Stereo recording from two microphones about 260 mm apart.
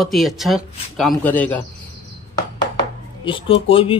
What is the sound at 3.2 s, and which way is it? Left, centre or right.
Speech, centre.